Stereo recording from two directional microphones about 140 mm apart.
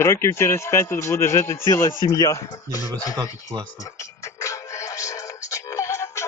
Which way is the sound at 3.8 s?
20° left (ahead or behind).